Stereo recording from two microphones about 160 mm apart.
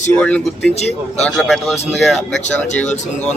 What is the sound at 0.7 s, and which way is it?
Speech, 45° left (ahead or behind).